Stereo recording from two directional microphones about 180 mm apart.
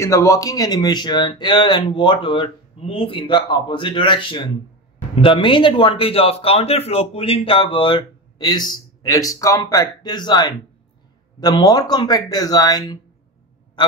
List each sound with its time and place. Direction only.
0.0 s speech: 15° left (ahead or behind)